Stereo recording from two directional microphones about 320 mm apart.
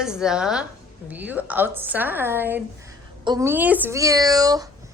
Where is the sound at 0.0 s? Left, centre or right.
Centre.